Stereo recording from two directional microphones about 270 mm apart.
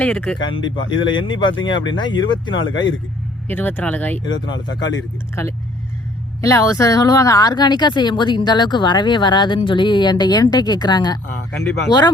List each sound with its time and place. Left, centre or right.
0.0 s speech: centre
0.5 s speech: centre